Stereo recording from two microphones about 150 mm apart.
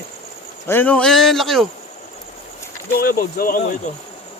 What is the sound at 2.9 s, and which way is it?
Speech, 85° left.